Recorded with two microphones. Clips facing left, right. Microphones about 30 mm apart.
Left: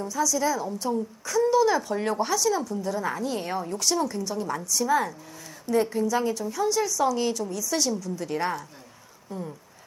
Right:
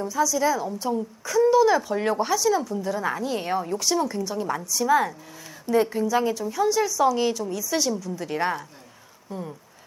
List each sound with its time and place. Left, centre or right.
0.0 s a woman's voice: centre